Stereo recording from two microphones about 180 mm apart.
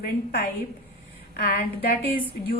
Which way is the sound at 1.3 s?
60° left (ahead or behind).